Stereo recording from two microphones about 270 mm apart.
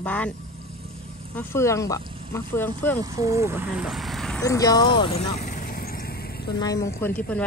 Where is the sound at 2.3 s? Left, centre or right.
Centre.